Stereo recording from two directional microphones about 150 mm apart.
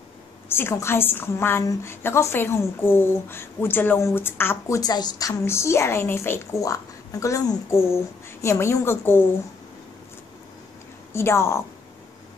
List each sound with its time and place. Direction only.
0.5 s a woman's voice: 15° left (ahead or behind)
11.1 s a woman's voice: 15° left (ahead or behind)